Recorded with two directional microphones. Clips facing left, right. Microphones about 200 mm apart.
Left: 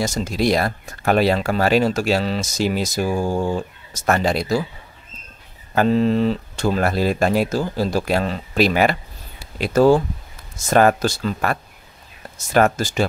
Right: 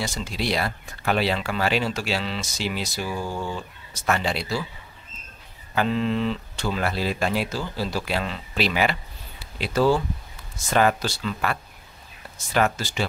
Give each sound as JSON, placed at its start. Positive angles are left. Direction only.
{"t": 0.0, "sound": "speech", "side_deg": 45}
{"t": 5.8, "sound": "speech", "side_deg": 40}